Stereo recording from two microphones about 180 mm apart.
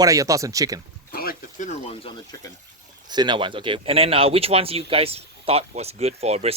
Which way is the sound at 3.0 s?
25° right (ahead or behind).